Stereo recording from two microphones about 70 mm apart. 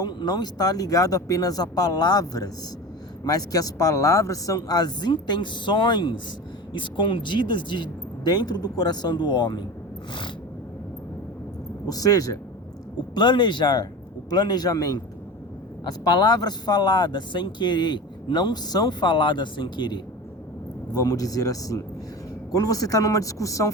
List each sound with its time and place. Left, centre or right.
0.0 s speech: left
11.9 s speech: left
13.1 s a man's voice: left
15.8 s speech: left
20.9 s speech: left